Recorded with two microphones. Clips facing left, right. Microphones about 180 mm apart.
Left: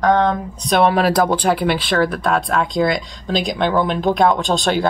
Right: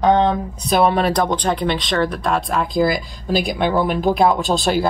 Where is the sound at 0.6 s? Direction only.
Centre (ahead or behind).